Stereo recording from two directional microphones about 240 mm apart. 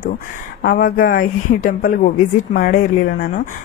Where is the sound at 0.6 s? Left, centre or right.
Left.